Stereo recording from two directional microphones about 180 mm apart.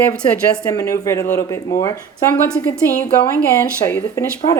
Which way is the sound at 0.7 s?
15° left (ahead or behind).